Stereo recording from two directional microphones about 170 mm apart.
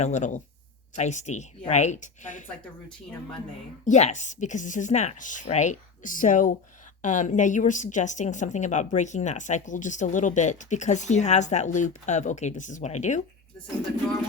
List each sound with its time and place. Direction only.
0.0 s a woman's voice: 45° left (ahead or behind)
3.8 s a woman's voice: 45° left (ahead or behind)